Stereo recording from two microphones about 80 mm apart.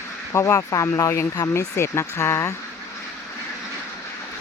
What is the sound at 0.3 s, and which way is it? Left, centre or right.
Speech, left.